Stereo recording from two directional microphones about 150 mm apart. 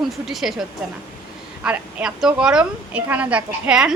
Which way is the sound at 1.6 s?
10° right (ahead or behind).